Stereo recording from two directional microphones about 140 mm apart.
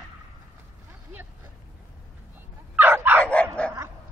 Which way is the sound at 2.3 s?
15° right (ahead or behind).